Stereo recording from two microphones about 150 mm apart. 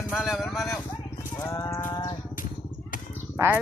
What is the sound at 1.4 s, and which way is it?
Speech, 20° left (ahead or behind).